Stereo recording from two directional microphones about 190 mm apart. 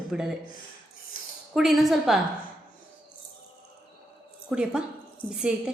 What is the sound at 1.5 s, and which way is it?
Speech, centre (ahead or behind).